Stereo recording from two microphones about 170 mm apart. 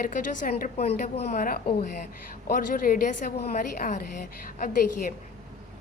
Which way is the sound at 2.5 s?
55° left (ahead or behind).